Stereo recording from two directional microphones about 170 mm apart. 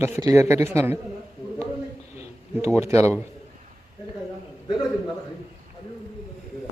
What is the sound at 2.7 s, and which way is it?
Speech, 15° right (ahead or behind).